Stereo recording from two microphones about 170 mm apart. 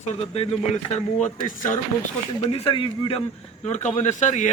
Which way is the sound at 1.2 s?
45° left (ahead or behind).